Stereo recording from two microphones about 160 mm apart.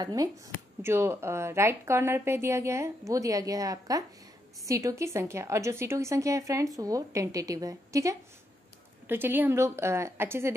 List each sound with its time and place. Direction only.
0.0 s a woman's voice: 25° right (ahead or behind)